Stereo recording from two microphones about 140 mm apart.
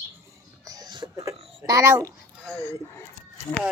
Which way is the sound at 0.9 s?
35° right (ahead or behind).